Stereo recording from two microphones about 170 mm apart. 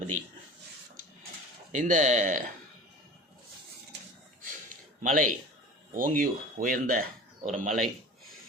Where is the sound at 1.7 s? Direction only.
45° right (ahead or behind).